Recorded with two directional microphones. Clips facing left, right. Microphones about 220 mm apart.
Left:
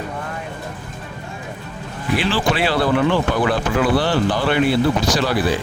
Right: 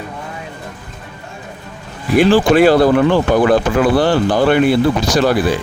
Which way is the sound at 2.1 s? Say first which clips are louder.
Right 10 dB; 45° right (ahead or behind).